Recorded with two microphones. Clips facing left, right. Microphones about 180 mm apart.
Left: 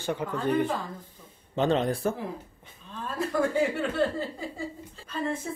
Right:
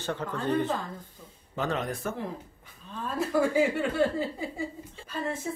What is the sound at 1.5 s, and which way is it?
Speech, 30° left (ahead or behind).